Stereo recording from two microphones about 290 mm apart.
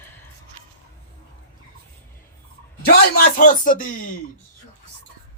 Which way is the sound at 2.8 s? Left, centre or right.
Left.